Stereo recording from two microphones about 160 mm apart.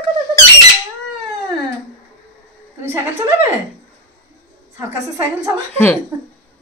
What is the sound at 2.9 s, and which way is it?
Speech, 15° right (ahead or behind).